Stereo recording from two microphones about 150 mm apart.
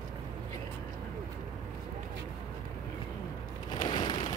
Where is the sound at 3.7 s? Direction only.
30° left (ahead or behind).